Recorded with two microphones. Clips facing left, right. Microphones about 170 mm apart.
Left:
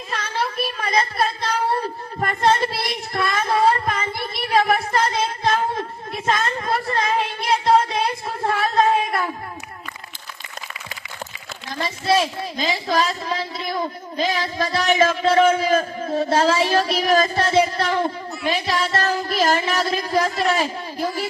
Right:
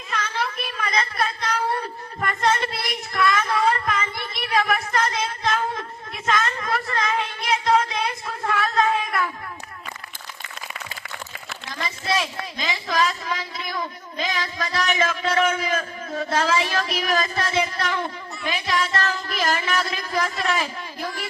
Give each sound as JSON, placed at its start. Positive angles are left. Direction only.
{"t": 0.1, "sound": "child singing", "side_deg": 35}
{"t": 11.8, "sound": "a woman's voice", "side_deg": 35}